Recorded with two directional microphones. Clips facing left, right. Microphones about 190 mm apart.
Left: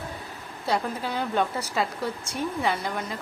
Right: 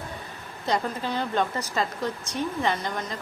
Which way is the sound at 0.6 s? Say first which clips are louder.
Even; 5° left (ahead or behind).